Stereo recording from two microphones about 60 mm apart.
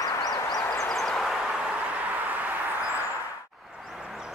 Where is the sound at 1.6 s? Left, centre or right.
Right.